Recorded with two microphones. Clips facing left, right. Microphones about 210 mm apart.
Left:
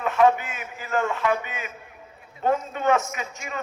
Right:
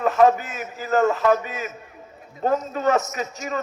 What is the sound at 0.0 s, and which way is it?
A man's voice, 35° right (ahead or behind).